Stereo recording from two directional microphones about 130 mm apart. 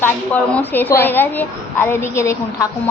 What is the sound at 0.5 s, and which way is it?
A woman's voice, 15° left (ahead or behind).